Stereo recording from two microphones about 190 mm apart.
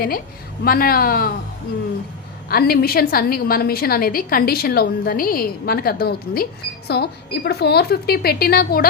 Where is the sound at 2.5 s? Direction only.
50° left (ahead or behind).